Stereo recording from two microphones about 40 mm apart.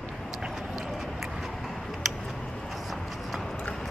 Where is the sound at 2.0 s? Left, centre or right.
Centre.